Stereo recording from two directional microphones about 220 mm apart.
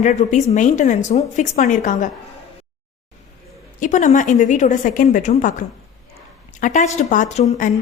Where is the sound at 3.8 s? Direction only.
35° left (ahead or behind).